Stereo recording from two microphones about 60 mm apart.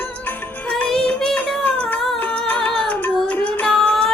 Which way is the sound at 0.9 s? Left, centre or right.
Centre.